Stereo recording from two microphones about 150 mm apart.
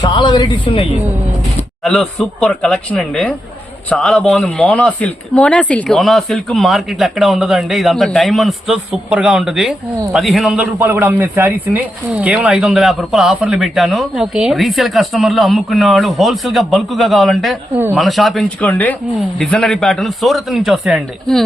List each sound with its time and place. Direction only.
0.0 s speech: 30° left (ahead or behind)
1.8 s a man's voice: centre (ahead or behind)
18.6 s a man's voice: 10° left (ahead or behind)